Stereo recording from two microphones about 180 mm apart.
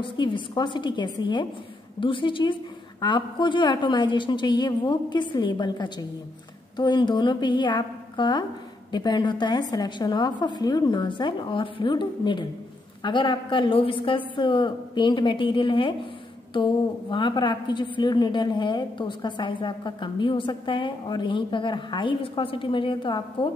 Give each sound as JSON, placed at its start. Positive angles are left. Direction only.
{"t": 0.0, "sound": "a woman's voice", "side_deg": 25}